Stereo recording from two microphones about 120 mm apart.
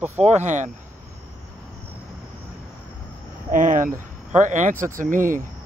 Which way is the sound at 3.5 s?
90° right.